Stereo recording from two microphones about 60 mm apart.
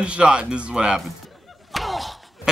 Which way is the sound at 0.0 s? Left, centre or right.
Centre.